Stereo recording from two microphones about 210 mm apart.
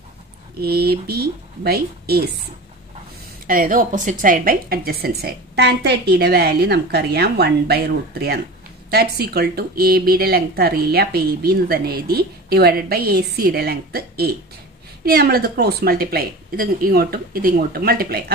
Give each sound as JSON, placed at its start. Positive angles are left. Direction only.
{"t": 0.6, "sound": "a woman's voice", "side_deg": -50}
{"t": 3.4, "sound": "a woman's voice", "side_deg": -40}